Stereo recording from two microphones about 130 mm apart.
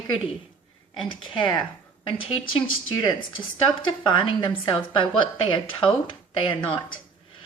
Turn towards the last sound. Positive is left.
turn(degrees=40)  # may be behind; listen again after turning